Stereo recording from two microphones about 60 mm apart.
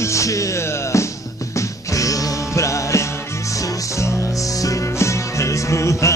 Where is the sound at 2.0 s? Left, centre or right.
Left.